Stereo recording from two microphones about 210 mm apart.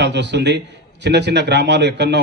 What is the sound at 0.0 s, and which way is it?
A man's voice, 55° right (ahead or behind).